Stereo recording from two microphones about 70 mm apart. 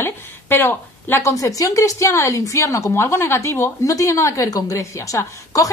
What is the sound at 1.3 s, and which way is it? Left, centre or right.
A woman's voice, left.